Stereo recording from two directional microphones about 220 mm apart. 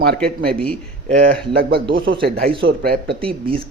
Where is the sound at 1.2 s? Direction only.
45° right (ahead or behind).